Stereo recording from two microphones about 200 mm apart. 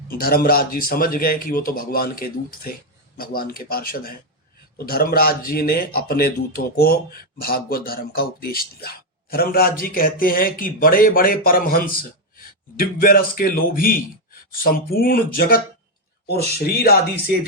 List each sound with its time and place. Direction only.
0.1 s speech: 50° left (ahead or behind)